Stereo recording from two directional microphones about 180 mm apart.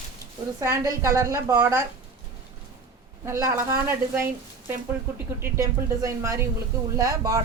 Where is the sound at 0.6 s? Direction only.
15° right (ahead or behind).